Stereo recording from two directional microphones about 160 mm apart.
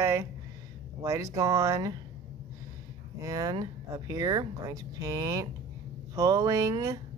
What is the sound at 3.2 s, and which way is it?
Speech, 20° right (ahead or behind).